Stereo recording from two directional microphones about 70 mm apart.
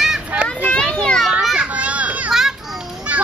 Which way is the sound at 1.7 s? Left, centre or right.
Centre.